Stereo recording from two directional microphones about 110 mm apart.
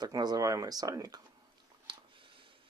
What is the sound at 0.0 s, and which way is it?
Speech, 40° right (ahead or behind).